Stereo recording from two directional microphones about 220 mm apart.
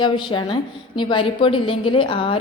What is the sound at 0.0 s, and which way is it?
A woman's voice, 20° left (ahead or behind).